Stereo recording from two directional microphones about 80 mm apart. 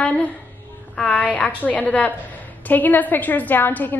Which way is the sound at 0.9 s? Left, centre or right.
Centre.